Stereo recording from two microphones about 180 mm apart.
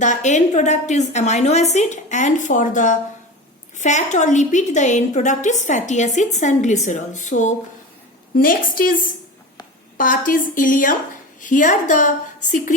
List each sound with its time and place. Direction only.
0.0 s a woman's voice: 40° left (ahead or behind)